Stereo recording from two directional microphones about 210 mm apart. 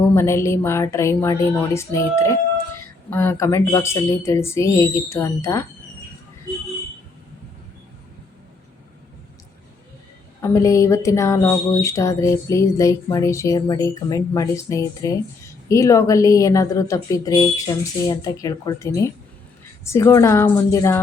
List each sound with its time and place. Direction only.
0.1 s speech: 10° left (ahead or behind)
10.4 s speech: 15° left (ahead or behind)